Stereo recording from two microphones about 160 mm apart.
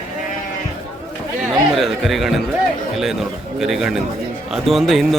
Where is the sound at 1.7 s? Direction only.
Centre (ahead or behind).